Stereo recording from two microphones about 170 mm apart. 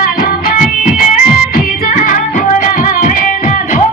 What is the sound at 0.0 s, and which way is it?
Music, 60° left (ahead or behind).